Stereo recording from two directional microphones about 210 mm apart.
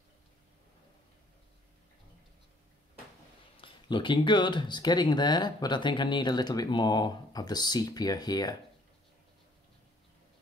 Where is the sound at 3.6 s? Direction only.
25° left (ahead or behind).